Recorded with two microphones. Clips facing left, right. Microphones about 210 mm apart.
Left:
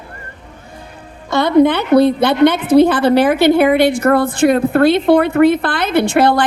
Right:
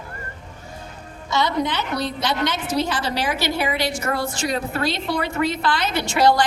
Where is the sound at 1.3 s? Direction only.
55° left (ahead or behind).